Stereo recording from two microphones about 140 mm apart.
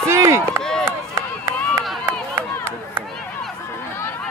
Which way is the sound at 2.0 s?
15° right (ahead or behind).